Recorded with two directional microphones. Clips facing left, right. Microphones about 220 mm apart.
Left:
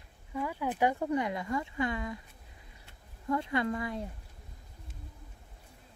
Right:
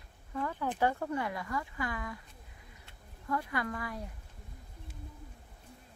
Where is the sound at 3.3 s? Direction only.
25° left (ahead or behind).